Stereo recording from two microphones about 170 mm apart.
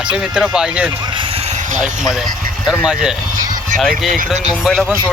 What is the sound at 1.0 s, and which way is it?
Vehicle, 30° right (ahead or behind).